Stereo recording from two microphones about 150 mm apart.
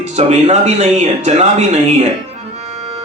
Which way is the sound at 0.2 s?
45° right (ahead or behind).